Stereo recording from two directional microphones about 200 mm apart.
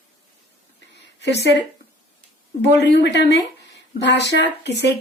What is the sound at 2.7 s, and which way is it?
Speech, 60° left (ahead or behind).